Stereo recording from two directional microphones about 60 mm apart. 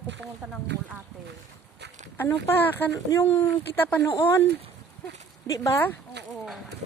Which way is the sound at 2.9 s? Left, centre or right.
Left.